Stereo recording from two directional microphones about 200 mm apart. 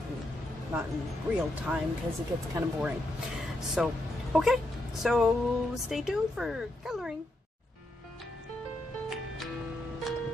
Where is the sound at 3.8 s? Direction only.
Centre (ahead or behind).